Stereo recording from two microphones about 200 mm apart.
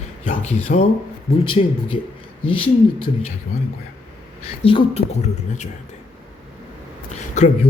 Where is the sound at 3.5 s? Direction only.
45° left (ahead or behind).